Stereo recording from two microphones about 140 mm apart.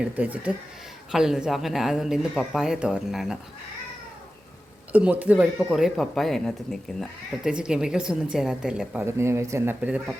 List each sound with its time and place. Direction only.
0.0 s speech: 10° right (ahead or behind)
4.9 s speech: 10° right (ahead or behind)
9.0 s speech: 20° right (ahead or behind)